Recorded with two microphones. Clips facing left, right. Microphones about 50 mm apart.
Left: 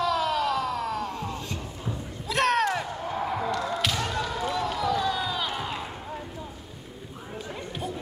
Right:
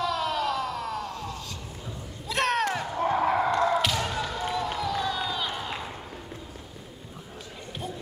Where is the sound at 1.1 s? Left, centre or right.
Left.